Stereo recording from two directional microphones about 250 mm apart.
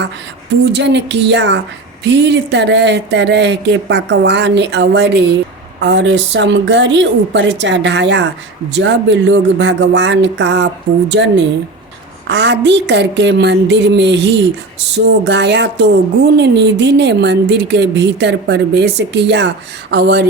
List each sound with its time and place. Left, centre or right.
0.6 s speech: right